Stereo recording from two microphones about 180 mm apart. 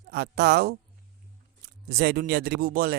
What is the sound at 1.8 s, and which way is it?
Speech, 60° right (ahead or behind).